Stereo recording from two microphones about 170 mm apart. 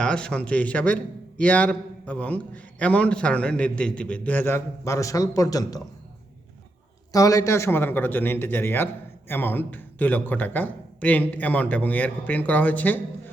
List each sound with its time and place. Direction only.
0.0 s a man's voice: 5° left (ahead or behind)
7.1 s a man's voice: 20° left (ahead or behind)